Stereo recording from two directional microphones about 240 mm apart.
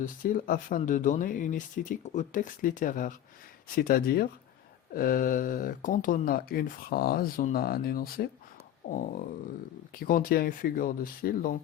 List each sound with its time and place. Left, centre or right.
0.0 s speech: left